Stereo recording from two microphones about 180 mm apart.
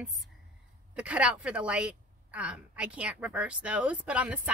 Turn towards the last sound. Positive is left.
turn(degrees=-5)  # may be behind; listen again after turning